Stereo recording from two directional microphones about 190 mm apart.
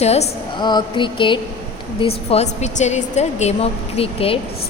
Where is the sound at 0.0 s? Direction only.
35° left (ahead or behind).